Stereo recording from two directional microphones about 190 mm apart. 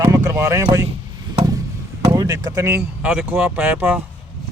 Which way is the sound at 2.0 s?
20° right (ahead or behind).